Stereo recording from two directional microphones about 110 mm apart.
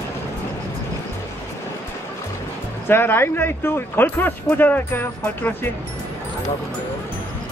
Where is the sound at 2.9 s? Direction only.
20° left (ahead or behind).